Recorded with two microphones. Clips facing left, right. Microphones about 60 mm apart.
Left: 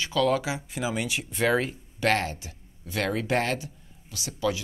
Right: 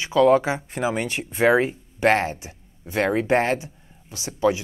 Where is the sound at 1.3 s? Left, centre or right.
Right.